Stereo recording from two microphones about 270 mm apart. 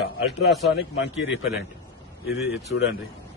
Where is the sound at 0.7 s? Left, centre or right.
Left.